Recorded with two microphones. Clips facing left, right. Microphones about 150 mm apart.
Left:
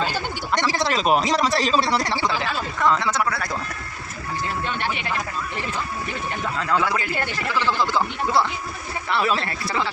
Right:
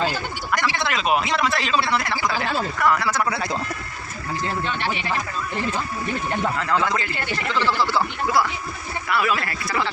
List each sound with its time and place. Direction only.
0.5 s a man's voice: 35° left (ahead or behind)
2.7 s speech: 20° left (ahead or behind)
3.2 s speech: 20° right (ahead or behind)
6.8 s speech: 10° left (ahead or behind)
9.0 s speech: 30° left (ahead or behind)